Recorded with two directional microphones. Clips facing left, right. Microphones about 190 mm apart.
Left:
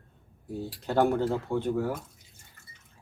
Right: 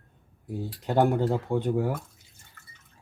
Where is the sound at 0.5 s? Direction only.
15° right (ahead or behind).